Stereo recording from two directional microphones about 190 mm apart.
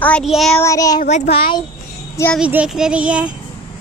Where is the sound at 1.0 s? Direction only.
35° left (ahead or behind).